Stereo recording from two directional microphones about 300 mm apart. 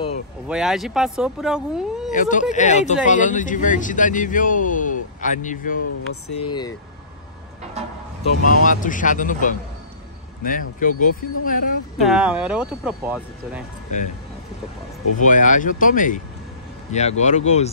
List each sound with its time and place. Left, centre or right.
0.5 s speech: centre
2.1 s speech: left
8.2 s speech: left
12.0 s speech: centre
15.1 s speech: left